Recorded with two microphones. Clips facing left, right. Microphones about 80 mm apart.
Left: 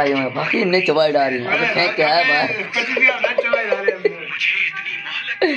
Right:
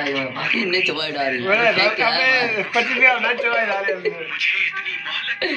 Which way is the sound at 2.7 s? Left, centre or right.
Right.